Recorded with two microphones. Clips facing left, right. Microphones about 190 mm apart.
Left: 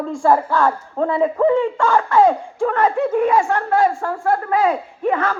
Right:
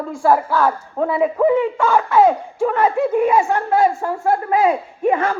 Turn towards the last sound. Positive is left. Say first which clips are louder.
# right 2 dB
turn(degrees=-15)  # may be behind; listen again after turning